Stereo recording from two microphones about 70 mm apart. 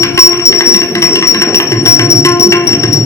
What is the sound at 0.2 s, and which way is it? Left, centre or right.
Music, left.